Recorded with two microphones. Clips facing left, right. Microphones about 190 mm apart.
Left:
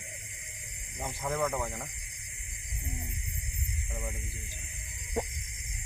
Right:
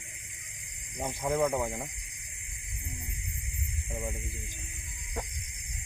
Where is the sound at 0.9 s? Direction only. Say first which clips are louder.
Right 4 dB; 15° right (ahead or behind).